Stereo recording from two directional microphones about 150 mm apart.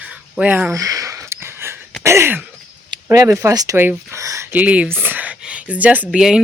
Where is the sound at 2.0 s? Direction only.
15° right (ahead or behind).